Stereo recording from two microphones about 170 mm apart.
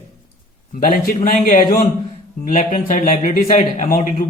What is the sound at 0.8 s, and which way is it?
A man's voice, 55° left (ahead or behind).